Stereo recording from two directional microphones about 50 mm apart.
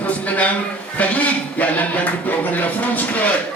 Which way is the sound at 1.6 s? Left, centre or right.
Left.